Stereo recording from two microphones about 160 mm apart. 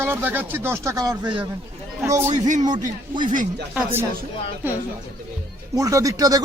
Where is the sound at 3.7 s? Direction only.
10° right (ahead or behind).